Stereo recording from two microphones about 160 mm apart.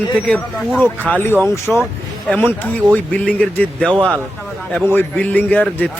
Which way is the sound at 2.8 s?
25° right (ahead or behind).